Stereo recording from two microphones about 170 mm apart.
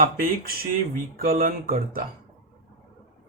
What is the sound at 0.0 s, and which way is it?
Speech, 60° right (ahead or behind).